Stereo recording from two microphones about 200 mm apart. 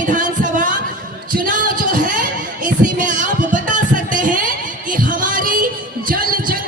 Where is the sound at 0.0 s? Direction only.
40° right (ahead or behind).